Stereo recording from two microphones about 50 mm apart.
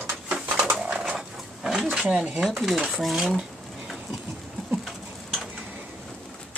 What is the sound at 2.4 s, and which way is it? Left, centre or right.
Speech, centre.